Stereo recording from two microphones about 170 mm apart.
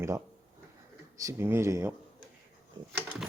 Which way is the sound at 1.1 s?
15° right (ahead or behind).